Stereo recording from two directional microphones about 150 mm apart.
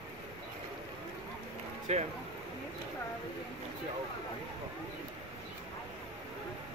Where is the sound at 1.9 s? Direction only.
50° right (ahead or behind).